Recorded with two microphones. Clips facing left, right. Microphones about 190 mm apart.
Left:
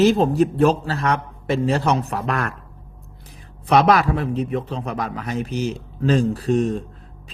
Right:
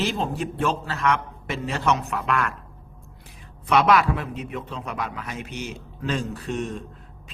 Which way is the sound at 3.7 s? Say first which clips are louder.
Left 3 dB; 40° left (ahead or behind).